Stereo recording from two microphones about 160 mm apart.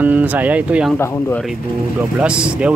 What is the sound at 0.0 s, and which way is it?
Speech, 10° right (ahead or behind).